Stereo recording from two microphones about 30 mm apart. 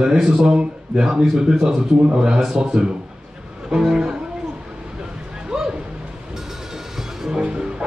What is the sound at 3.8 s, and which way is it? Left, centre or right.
Speech, centre.